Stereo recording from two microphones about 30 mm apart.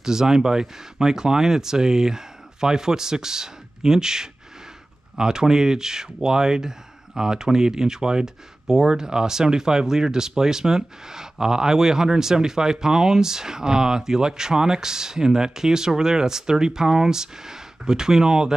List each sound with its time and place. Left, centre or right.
0.0 s speech: centre